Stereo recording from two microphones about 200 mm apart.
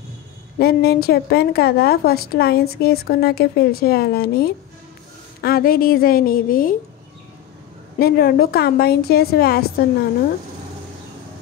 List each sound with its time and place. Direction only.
0.6 s a woman's voice: 50° left (ahead or behind)
8.0 s a woman's voice: 50° left (ahead or behind)